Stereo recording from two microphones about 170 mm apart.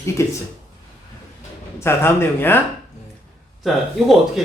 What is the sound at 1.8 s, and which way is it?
Speech, 15° left (ahead or behind).